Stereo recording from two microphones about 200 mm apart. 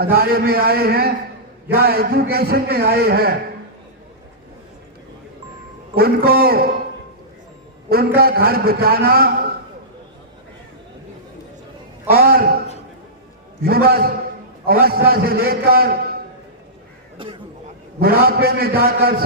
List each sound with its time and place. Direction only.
0.0 s a man's voice: 50° right (ahead or behind)
5.9 s a man's voice: 50° right (ahead or behind)
7.9 s a man's voice: 50° right (ahead or behind)
12.0 s a man's voice: 50° right (ahead or behind)
13.6 s a man's voice: 50° right (ahead or behind)
18.0 s a man's voice: 50° right (ahead or behind)